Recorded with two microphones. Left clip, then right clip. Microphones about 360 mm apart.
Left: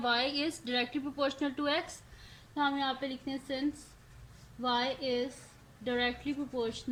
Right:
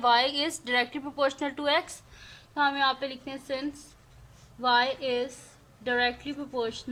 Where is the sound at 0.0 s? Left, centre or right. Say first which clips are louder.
Right 7 dB; right.